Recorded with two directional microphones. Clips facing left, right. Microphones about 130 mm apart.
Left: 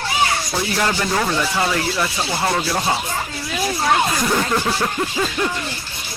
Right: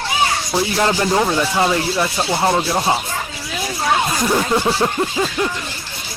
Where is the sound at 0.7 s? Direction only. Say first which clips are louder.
Right 4 dB; 25° right (ahead or behind).